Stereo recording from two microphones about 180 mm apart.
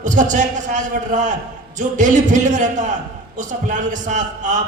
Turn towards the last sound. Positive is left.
turn(degrees=-45)  # may be behind; listen again after turning